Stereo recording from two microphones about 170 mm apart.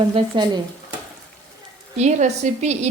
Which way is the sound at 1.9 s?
40° right (ahead or behind).